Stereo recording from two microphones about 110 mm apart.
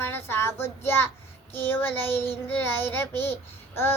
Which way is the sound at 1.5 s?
20° left (ahead or behind).